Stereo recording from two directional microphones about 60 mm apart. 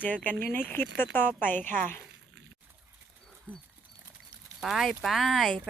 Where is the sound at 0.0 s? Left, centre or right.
Left.